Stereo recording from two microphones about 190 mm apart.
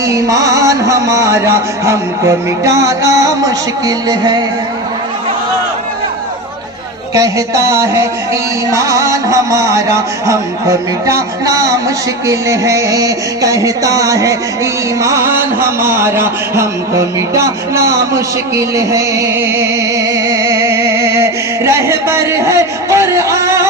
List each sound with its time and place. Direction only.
0.0 s music: 15° right (ahead or behind)
7.1 s music: 15° right (ahead or behind)
12.3 s a sound: 15° right (ahead or behind)